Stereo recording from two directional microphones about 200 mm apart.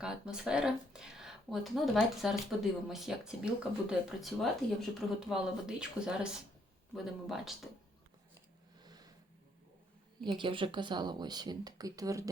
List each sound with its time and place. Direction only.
0.0 s speech: 5° right (ahead or behind)
8.8 s a sound: 20° right (ahead or behind)
10.2 s speech: 25° right (ahead or behind)